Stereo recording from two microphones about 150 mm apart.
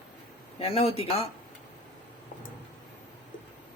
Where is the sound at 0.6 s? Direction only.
40° left (ahead or behind).